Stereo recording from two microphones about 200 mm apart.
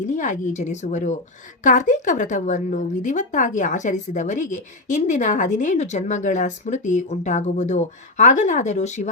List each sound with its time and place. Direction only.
0.0 s a woman's voice: 40° left (ahead or behind)